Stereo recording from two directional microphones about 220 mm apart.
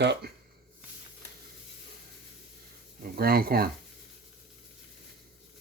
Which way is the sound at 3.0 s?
45° right (ahead or behind).